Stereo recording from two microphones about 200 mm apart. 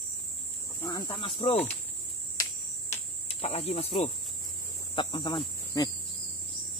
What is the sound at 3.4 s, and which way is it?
Speech, 30° left (ahead or behind).